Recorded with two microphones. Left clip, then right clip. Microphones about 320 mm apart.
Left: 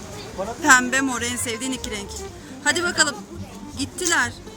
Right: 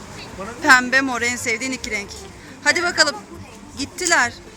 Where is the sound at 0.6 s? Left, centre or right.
Centre.